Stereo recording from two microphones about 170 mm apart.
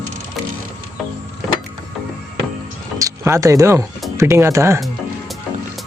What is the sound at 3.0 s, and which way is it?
Speech, 20° right (ahead or behind).